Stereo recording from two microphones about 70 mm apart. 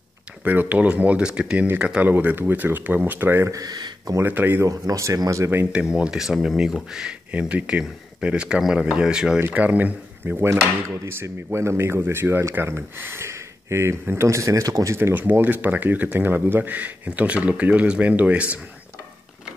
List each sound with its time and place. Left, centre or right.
0.4 s speech: right
2.0 s speech: right
3.4 s speech: right
4.2 s speech: right
4.6 s speech: right
5.7 s speech: centre
9.5 s speech: right
15.0 s speech: right